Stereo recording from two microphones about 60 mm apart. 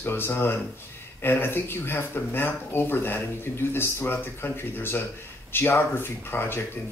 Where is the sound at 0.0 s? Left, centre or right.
Left.